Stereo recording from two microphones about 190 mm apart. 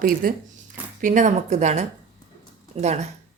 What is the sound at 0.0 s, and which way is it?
A woman's voice, 50° right (ahead or behind).